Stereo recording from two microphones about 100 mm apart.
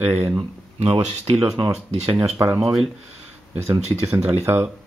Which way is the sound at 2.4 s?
40° right (ahead or behind).